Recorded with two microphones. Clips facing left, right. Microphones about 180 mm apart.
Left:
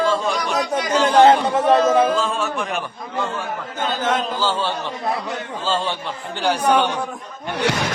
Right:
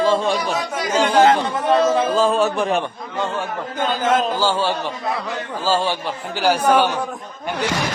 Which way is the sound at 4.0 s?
5° right (ahead or behind).